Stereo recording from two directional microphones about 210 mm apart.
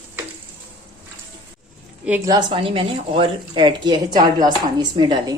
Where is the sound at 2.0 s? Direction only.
10° right (ahead or behind).